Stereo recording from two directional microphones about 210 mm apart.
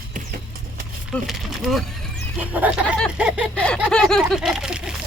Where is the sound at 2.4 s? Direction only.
5° right (ahead or behind).